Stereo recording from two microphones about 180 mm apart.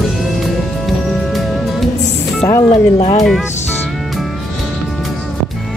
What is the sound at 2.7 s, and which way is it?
Speech, 35° left (ahead or behind).